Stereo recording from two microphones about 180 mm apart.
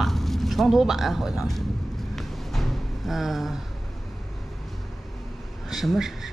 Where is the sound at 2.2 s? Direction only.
Centre (ahead or behind).